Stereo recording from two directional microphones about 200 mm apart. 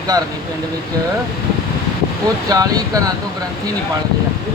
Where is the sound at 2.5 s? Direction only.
20° right (ahead or behind).